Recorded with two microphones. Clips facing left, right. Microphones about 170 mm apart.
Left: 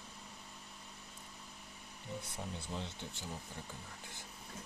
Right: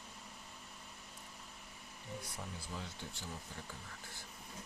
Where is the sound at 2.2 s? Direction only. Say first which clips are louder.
Left 3 dB; 25° left (ahead or behind).